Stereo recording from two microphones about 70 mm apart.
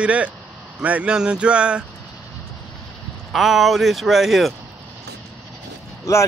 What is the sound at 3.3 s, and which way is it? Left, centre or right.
Speech, centre.